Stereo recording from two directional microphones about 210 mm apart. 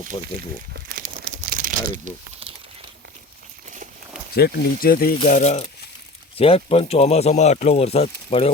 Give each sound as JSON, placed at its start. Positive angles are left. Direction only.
{"t": 0.1, "sound": "speech", "side_deg": 30}
{"t": 0.9, "sound": "crumpling", "side_deg": -40}
{"t": 3.7, "sound": "walk", "side_deg": -35}
{"t": 4.4, "sound": "speech", "side_deg": 50}
{"t": 5.2, "sound": "speech", "side_deg": 35}